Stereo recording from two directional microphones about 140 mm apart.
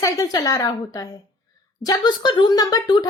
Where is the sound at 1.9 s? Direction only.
35° left (ahead or behind).